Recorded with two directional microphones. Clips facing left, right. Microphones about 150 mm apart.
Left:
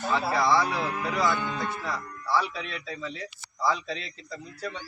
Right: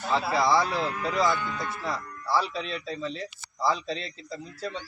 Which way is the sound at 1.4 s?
20° left (ahead or behind).